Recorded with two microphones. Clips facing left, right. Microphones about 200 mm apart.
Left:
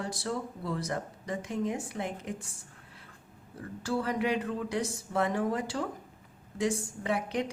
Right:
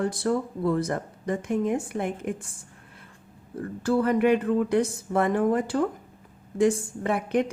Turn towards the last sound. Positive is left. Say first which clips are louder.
# right 6 dB
turn(degrees=-55)  # may be behind; listen again after turning